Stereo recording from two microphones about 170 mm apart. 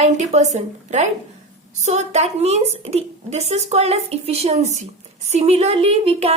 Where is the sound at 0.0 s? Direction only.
45° right (ahead or behind).